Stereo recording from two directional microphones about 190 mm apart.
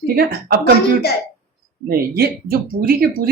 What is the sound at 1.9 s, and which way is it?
Speech, 50° right (ahead or behind).